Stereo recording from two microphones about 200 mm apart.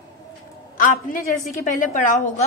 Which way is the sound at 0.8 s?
40° left (ahead or behind).